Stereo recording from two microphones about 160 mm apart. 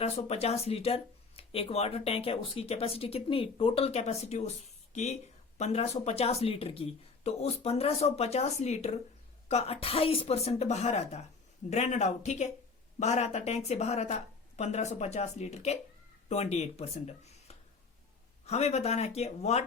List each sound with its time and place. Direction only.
0.0 s a woman's voice: 40° left (ahead or behind)